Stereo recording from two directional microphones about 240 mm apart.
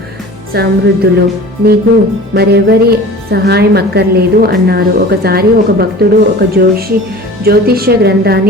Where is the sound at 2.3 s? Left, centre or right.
Right.